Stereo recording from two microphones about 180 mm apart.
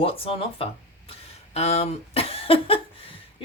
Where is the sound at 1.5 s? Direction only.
35° left (ahead or behind).